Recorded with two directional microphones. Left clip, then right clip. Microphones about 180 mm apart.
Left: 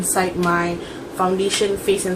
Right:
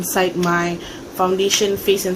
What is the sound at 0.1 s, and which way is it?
Speech, 55° right (ahead or behind).